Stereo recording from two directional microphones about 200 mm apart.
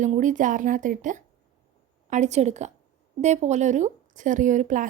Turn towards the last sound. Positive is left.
turn(degrees=-40)  # may be behind; listen again after turning